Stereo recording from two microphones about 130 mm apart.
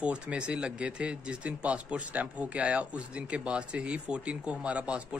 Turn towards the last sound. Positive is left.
turn(degrees=-10)  # may be behind; listen again after turning